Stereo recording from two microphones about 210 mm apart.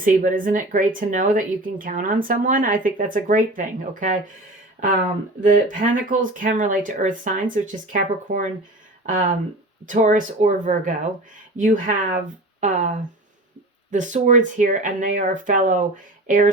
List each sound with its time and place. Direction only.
0.0 s speech: 40° right (ahead or behind)
5.4 s speech: 40° right (ahead or behind)
9.8 s speech: 35° right (ahead or behind)